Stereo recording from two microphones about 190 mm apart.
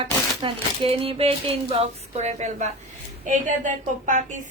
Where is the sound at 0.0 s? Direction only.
30° right (ahead or behind).